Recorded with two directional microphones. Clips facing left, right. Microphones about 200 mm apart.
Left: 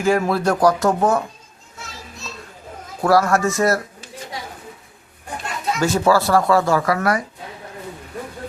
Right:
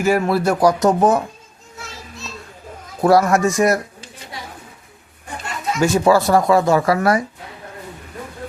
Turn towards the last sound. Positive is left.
turn(degrees=-25)  # may be behind; listen again after turning